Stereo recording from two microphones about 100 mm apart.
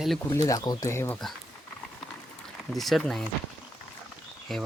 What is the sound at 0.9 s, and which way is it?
Speech, 25° left (ahead or behind).